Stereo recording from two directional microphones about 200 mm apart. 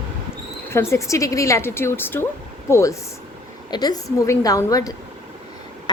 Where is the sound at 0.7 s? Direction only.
15° left (ahead or behind).